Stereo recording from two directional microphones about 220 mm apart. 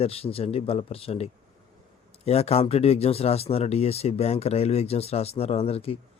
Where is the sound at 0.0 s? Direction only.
25° left (ahead or behind).